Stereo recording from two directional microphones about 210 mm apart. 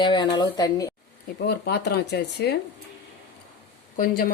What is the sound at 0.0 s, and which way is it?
Speech, 20° left (ahead or behind).